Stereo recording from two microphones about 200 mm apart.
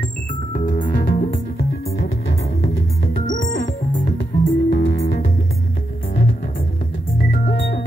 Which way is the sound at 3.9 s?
60° left (ahead or behind).